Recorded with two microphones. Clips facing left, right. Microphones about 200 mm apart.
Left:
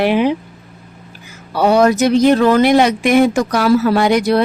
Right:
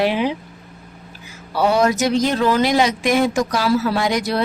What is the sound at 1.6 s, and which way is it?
A woman's voice, 60° left (ahead or behind).